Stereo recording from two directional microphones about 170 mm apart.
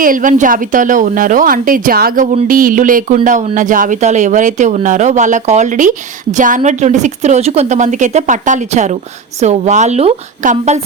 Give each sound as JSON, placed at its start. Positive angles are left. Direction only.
{"t": 0.0, "sound": "speech", "side_deg": -50}